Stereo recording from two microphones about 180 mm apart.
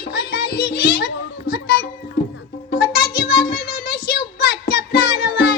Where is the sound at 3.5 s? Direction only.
55° left (ahead or behind).